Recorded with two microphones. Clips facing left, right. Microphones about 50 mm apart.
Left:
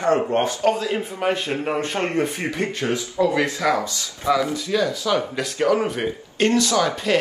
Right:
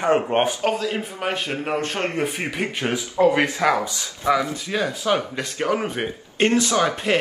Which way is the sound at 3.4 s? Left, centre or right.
Right.